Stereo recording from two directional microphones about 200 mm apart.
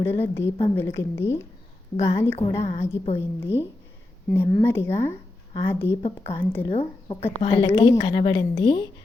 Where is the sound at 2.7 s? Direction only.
30° left (ahead or behind).